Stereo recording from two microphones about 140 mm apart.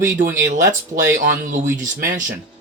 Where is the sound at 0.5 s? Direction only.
65° right (ahead or behind).